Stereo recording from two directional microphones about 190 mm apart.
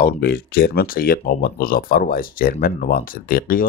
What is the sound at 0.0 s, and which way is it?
Speech, 55° left (ahead or behind).